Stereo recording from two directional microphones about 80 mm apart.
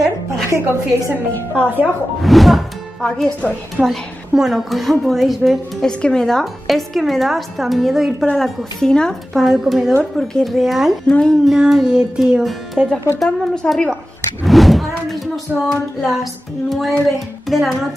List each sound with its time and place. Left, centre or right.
0.5 s a woman's voice: right
1.5 s a woman's voice: right
2.2 s a woman's voice: centre
3.0 s speech: centre
3.8 s music: centre
4.3 s a woman's voice: centre
11.1 s speech: centre
11.4 s music: centre
13.2 s a woman's voice: centre
17.5 s music: centre